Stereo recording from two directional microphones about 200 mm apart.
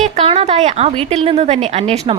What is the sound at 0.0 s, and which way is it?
A woman's voice, 30° right (ahead or behind).